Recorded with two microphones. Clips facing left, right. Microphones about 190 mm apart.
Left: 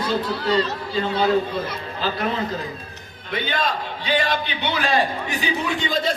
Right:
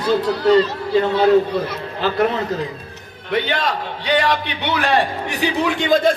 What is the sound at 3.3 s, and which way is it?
A man's voice, 75° right (ahead or behind).